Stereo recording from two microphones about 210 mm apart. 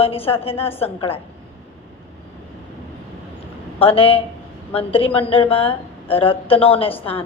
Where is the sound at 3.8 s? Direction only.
25° left (ahead or behind).